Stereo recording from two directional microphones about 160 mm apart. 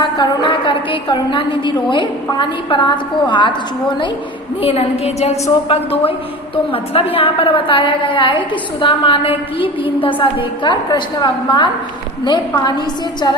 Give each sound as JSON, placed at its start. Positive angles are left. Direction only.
{"t": 0.0, "sound": "a woman's voice", "side_deg": 30}
{"t": 4.6, "sound": "a woman's voice", "side_deg": 40}